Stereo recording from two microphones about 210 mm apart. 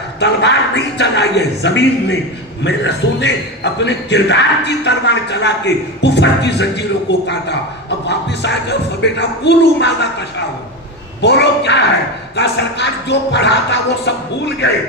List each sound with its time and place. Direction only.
0.2 s a man's voice: 55° left (ahead or behind)
11.2 s a man's voice: 55° left (ahead or behind)